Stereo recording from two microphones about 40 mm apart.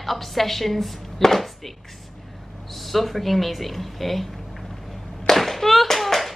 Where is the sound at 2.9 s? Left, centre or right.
Centre.